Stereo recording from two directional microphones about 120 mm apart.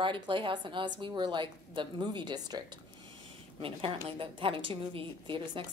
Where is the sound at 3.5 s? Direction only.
50° right (ahead or behind).